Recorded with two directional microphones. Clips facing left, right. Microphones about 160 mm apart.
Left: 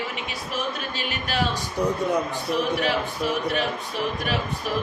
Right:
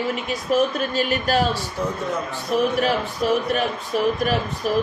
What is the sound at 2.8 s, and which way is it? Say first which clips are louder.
A man's voice: right 3 dB; 40° right (ahead or behind).